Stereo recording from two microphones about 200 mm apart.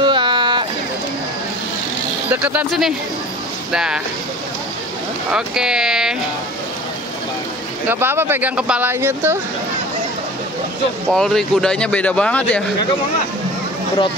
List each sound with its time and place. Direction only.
0.0 s a sound: 25° right (ahead or behind)
2.3 s speech: 5° right (ahead or behind)
5.3 s speech: 5° right (ahead or behind)
7.9 s speech: 10° right (ahead or behind)
11.1 s speech: centre (ahead or behind)